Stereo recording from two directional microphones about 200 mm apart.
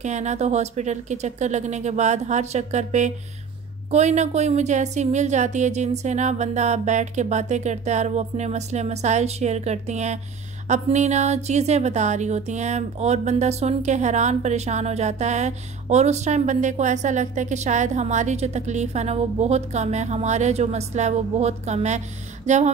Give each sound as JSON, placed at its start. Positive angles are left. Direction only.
{"t": 0.0, "sound": "speech", "side_deg": -35}